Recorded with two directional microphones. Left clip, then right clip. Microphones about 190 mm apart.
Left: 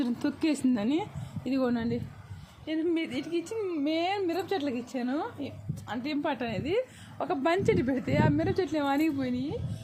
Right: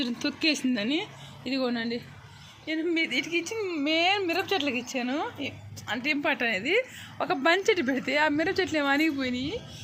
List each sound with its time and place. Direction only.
0.0 s speech: 40° left (ahead or behind)
2.6 s a woman's voice: 30° left (ahead or behind)